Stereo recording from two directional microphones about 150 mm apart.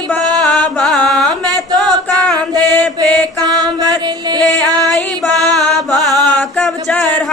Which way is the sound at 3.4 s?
25° right (ahead or behind).